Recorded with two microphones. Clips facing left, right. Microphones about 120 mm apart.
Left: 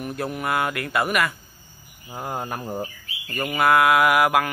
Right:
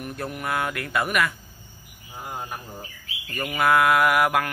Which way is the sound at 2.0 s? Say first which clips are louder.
Left 5 dB; 60° left (ahead or behind).